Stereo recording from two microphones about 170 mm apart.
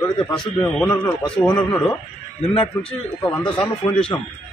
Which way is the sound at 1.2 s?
5° left (ahead or behind).